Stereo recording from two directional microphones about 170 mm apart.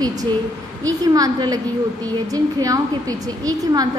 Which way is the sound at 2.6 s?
20° right (ahead or behind).